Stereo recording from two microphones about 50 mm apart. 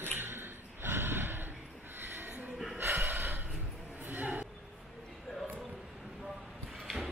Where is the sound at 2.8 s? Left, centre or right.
Right.